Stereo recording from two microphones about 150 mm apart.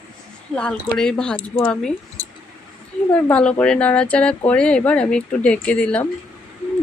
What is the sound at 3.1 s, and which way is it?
A woman's voice, 10° left (ahead or behind).